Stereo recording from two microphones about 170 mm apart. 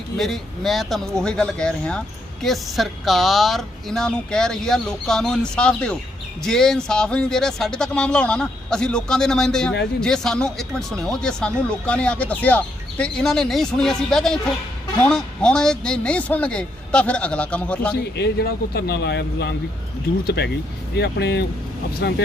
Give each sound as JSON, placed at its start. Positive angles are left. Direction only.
{"t": 0.2, "sound": "a man's voice", "side_deg": 0}
{"t": 18.0, "sound": "speech", "side_deg": 75}